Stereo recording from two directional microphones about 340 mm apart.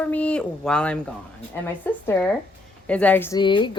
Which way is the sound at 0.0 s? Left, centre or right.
Centre.